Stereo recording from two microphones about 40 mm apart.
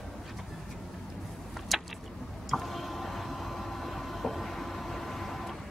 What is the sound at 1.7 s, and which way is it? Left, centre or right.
Vehicle, centre.